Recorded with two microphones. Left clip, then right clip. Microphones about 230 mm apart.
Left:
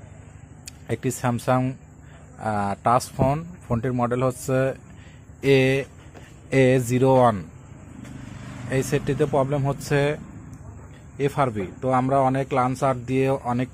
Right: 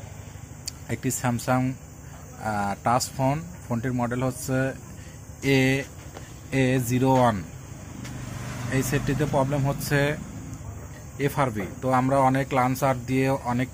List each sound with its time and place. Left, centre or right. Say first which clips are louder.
0.7 s speech: left 3 dB; left
8.6 s speech: left 3 dB; left
11.1 s speech: left 2 dB; left